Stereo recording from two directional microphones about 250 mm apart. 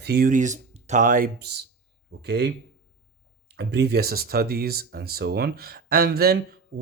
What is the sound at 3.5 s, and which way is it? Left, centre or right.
Speech, right.